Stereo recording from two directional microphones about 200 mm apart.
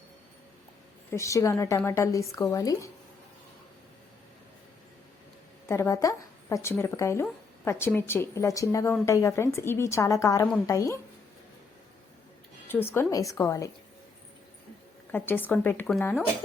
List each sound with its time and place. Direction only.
1.1 s a woman's voice: 15° left (ahead or behind)
5.6 s a woman's voice: 15° left (ahead or behind)
12.6 s a woman's voice: 10° left (ahead or behind)
15.1 s a woman's voice: 10° left (ahead or behind)